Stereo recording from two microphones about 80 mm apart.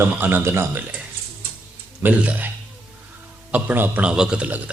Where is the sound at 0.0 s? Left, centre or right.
Right.